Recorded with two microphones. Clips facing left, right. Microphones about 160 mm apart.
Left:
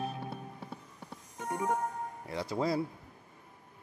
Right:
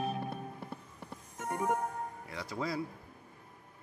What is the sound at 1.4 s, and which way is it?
Music, 15° left (ahead or behind).